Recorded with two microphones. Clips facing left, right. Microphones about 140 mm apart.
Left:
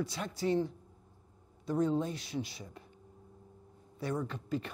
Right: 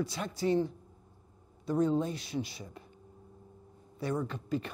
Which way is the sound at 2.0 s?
10° right (ahead or behind).